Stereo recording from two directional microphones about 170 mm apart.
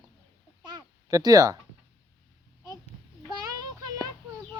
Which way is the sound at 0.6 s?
20° right (ahead or behind).